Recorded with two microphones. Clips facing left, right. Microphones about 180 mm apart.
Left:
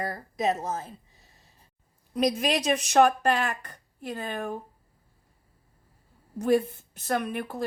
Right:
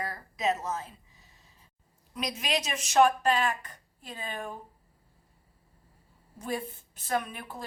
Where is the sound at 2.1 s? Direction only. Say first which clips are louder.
Left 7 dB; 50° left (ahead or behind).